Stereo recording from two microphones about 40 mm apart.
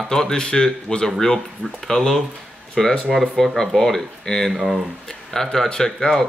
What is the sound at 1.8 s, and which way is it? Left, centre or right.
Speech, centre.